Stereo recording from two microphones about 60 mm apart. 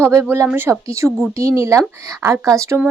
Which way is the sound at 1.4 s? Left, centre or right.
Right.